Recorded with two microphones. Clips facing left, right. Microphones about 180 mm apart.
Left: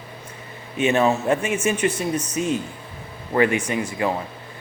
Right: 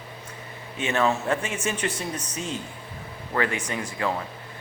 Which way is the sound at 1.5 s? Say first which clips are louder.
Left 7 dB; 10° left (ahead or behind).